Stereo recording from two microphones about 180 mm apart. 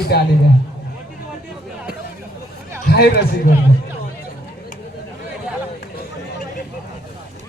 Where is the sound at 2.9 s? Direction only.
60° left (ahead or behind).